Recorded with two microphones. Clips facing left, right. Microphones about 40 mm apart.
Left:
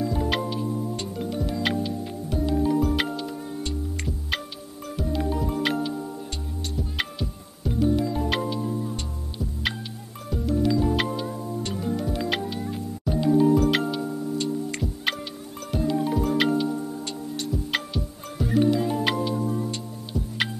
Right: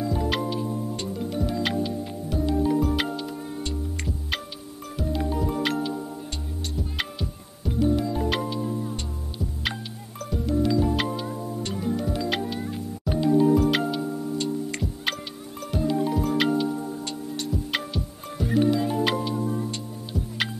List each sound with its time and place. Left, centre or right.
0.3 s music: centre
4.9 s music: centre
10.3 s music: centre